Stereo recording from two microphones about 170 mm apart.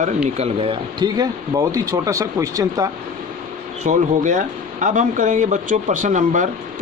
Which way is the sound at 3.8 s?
45° right (ahead or behind).